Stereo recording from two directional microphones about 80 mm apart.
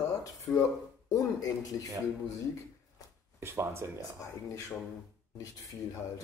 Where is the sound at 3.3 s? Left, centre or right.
Right.